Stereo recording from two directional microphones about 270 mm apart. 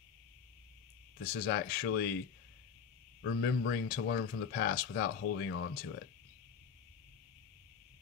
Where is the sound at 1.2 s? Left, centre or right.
Left.